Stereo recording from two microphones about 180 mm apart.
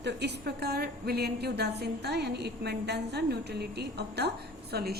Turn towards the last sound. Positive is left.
turn(degrees=-60)  # may be behind; listen again after turning